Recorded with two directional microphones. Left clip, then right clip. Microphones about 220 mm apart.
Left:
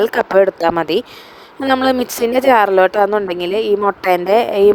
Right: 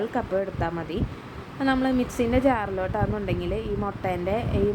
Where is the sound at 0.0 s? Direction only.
45° left (ahead or behind).